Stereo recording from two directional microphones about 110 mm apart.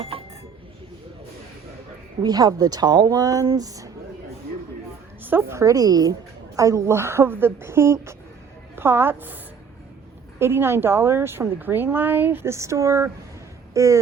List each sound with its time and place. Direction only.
2.2 s speech: 35° right (ahead or behind)
5.2 s a woman's voice: 20° right (ahead or behind)
10.4 s a woman's voice: 20° right (ahead or behind)